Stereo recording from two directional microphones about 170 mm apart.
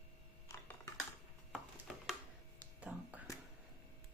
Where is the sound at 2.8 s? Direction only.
10° right (ahead or behind).